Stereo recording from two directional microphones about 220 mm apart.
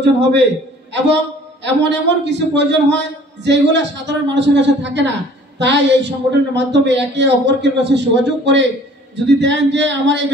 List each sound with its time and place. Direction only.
0.0 s a woman's voice: 50° right (ahead or behind)